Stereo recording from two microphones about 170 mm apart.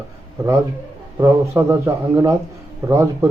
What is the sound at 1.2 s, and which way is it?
Speech, 15° right (ahead or behind).